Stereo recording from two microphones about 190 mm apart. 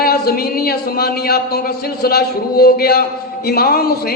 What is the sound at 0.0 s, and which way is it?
Speech, 50° left (ahead or behind).